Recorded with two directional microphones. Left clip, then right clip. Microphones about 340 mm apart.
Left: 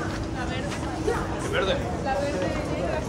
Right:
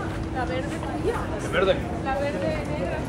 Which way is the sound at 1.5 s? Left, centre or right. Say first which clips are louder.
Right 4 dB; right.